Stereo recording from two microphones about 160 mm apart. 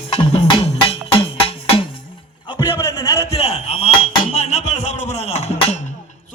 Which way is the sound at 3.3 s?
40° left (ahead or behind).